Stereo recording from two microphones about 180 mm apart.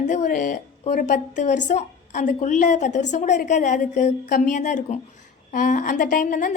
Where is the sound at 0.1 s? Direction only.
45° left (ahead or behind).